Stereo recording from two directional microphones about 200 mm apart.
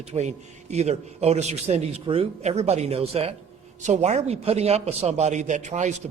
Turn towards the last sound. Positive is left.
turn(degrees=-35)  # may be behind; listen again after turning